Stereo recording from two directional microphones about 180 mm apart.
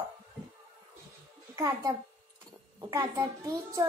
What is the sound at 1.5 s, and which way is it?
A child's voice, 20° right (ahead or behind).